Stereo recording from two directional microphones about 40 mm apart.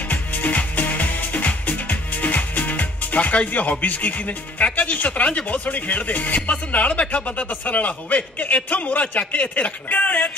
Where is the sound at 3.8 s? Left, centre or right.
Left.